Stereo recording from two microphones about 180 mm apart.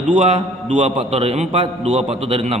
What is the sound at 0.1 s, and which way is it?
A man's voice, 30° right (ahead or behind).